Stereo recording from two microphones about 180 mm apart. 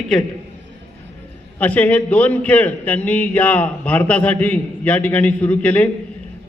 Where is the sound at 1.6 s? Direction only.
10° left (ahead or behind).